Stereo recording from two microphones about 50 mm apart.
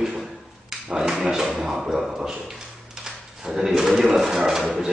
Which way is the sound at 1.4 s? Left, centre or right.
Right.